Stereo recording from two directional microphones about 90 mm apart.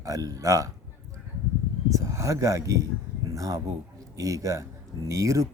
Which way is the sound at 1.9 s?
35° right (ahead or behind).